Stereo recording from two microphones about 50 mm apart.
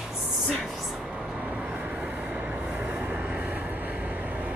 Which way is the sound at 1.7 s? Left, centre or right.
Right.